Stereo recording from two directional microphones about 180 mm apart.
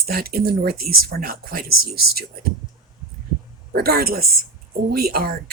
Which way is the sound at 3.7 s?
60° right (ahead or behind).